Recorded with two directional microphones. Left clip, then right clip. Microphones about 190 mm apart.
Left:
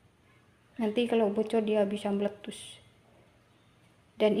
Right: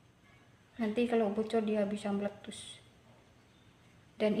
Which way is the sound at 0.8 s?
35° left (ahead or behind).